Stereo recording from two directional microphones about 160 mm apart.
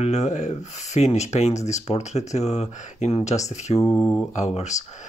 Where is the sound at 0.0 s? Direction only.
45° left (ahead or behind).